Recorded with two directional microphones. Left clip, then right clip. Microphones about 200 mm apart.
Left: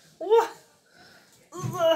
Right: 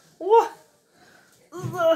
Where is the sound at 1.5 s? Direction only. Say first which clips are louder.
Right 2 dB; 25° right (ahead or behind).